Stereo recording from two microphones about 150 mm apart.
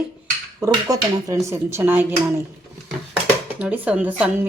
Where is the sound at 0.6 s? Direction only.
25° right (ahead or behind).